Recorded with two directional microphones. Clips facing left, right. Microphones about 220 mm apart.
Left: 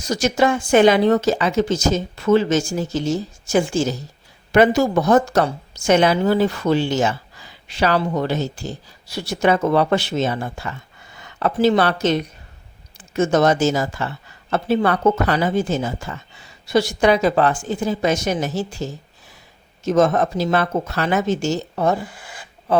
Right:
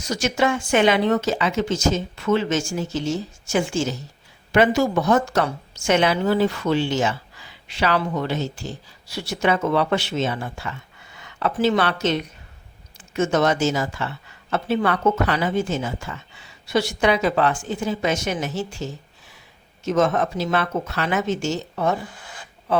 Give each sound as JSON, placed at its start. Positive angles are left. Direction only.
{"t": 0.1, "sound": "a woman's voice", "side_deg": 40}